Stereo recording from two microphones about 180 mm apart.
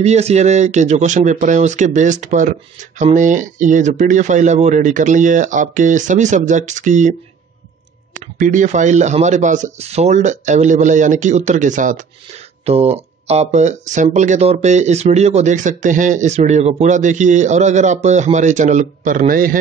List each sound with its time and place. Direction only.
0.0 s speech: 35° right (ahead or behind)
12.6 s speech: 35° right (ahead or behind); by 19.6 s 50° right (ahead or behind)